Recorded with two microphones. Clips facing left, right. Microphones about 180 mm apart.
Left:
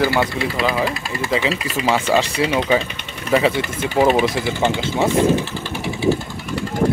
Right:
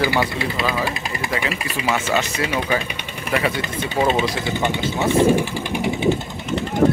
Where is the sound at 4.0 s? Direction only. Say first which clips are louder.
Left 4 dB; 10° left (ahead or behind).